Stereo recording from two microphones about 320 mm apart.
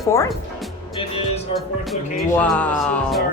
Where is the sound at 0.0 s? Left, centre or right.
Centre.